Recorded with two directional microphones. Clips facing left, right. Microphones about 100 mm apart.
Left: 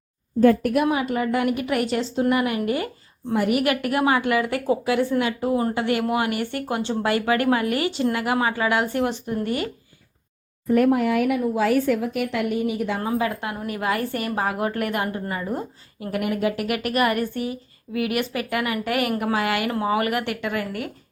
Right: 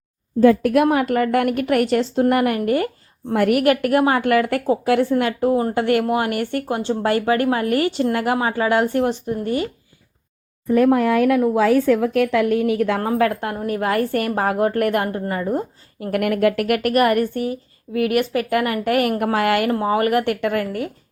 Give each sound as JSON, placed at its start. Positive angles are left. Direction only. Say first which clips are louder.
{"t": 0.6, "sound": "a woman's voice", "louder": "right 5 dB", "side_deg": -90}
{"t": 3.3, "sound": "a woman's voice", "louder": "right 4 dB", "side_deg": -75}
{"t": 3.6, "sound": "speech", "louder": "right 5 dB", "side_deg": -50}
{"t": 5.1, "sound": "speech", "louder": "right 4 dB", "side_deg": -45}
{"t": 5.8, "sound": "speech", "louder": "right 4 dB", "side_deg": -50}
{"t": 6.7, "sound": "speech", "louder": "right 2 dB", "side_deg": -35}
{"t": 10.8, "sound": "a woman's voice", "louder": "right 4 dB", "side_deg": -90}
{"t": 13.0, "sound": "speech", "louder": "right 5 dB", "side_deg": -55}
{"t": 13.6, "sound": "speech", "louder": "right 5 dB", "side_deg": -40}
{"t": 16.0, "sound": "speech", "louder": "right 5 dB", "side_deg": -60}
{"t": 19.7, "sound": "speech", "louder": "right 4 dB", "side_deg": -40}